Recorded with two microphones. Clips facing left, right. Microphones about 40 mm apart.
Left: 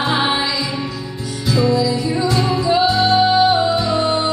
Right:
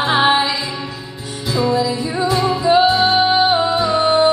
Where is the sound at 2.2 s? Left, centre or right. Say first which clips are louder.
Right 4 dB; centre.